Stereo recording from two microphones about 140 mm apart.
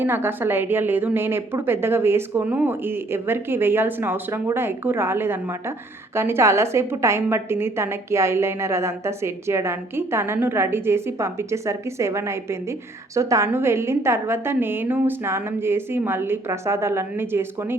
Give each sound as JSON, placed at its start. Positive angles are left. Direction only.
{"t": 0.0, "sound": "a woman's voice", "side_deg": -15}